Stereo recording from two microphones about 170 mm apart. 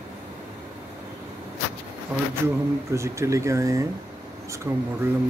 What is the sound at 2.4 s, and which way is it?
Speech, 15° right (ahead or behind).